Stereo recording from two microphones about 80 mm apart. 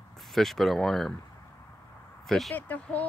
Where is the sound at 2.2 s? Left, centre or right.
Centre.